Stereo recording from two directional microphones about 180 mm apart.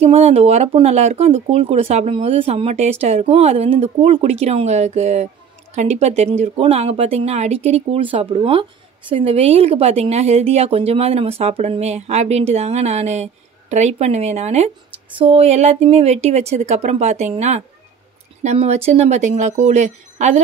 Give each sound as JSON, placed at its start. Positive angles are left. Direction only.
{"t": 0.0, "sound": "speech", "side_deg": -35}